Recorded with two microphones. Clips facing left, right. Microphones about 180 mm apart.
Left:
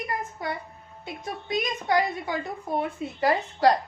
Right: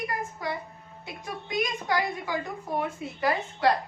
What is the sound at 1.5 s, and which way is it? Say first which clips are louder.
A woman's voice: left 3 dB; 20° left (ahead or behind).